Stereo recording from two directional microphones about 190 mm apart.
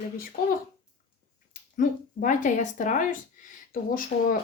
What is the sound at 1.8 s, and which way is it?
A woman's voice, 45° left (ahead or behind).